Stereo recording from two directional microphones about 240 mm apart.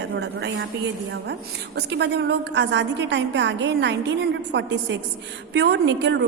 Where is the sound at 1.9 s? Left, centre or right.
Right.